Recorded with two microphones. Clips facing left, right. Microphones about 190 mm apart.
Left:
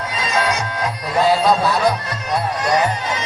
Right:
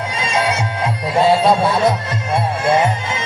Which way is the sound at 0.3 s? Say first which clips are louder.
Right 1 dB; 25° right (ahead or behind).